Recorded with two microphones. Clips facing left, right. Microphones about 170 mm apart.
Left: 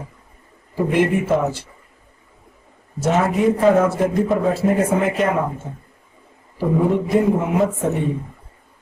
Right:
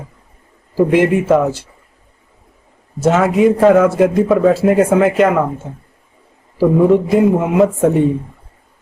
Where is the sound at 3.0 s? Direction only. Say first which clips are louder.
Right 5 dB; 90° right.